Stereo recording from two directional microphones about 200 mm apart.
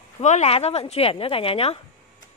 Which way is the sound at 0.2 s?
35° left (ahead or behind).